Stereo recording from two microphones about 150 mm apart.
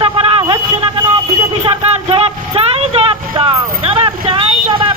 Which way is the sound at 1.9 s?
40° right (ahead or behind).